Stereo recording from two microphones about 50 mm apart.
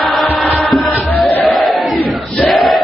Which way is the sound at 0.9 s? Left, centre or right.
Left.